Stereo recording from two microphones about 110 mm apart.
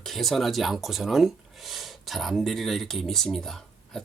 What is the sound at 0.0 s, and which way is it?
Speech, centre (ahead or behind).